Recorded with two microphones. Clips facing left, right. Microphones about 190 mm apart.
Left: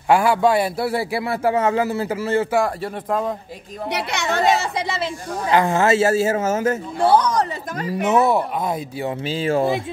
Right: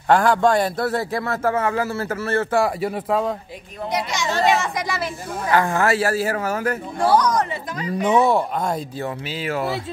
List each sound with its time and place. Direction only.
0.1 s a man's voice: 5° left (ahead or behind)
2.6 s speech: 5° right (ahead or behind)
3.9 s a child's voice: 60° left (ahead or behind)
4.5 s speech: 30° left (ahead or behind)
7.9 s speech: 5° left (ahead or behind)
9.2 s speech: 30° left (ahead or behind)